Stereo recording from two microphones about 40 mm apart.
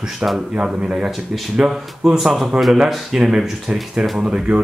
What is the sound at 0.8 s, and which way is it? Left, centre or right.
Speech, right.